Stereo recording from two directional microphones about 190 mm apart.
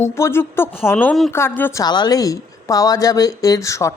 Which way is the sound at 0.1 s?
15° left (ahead or behind).